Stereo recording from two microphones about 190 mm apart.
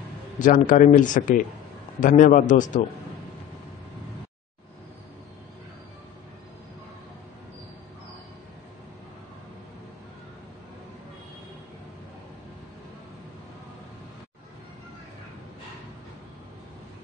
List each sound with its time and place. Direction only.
0.4 s speech: 45° left (ahead or behind)